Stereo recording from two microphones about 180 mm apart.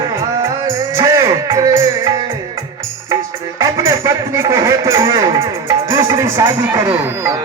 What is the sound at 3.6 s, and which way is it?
Speech, 15° right (ahead or behind).